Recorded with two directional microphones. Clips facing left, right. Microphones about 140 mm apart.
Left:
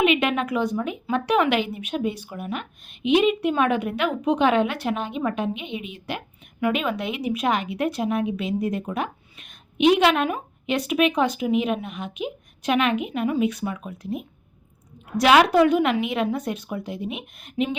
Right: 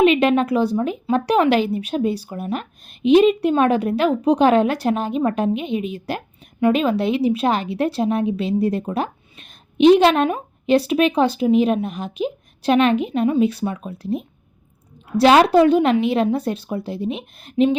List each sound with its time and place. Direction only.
0.0 s a woman's voice: 35° right (ahead or behind)